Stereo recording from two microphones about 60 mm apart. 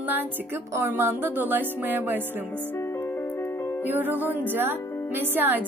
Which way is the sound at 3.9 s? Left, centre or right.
Right.